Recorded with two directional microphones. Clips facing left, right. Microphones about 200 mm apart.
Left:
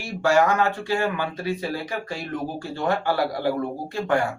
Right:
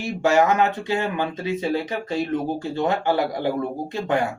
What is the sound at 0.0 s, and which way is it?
Speech, 20° right (ahead or behind).